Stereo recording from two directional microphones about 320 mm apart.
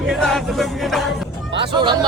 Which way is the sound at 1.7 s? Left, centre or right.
Centre.